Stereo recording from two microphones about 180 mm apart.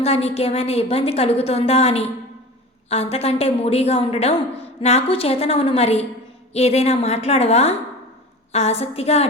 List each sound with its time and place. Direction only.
0.0 s a woman's voice: 35° left (ahead or behind)